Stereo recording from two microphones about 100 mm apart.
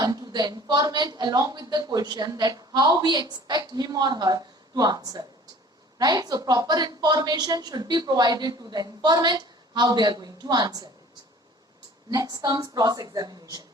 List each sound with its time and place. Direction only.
0.0 s a woman's voice: 35° right (ahead or behind)
12.1 s a woman's voice: 40° right (ahead or behind)